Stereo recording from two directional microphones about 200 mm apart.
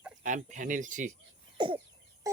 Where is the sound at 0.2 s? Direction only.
40° right (ahead or behind).